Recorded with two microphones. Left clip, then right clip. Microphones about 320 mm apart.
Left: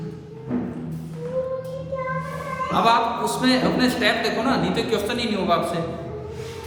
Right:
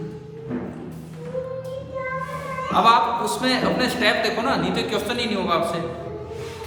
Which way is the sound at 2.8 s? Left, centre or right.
Centre.